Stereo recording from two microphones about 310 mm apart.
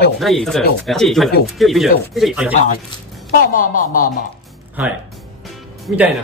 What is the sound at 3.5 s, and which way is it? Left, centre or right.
Speech, left.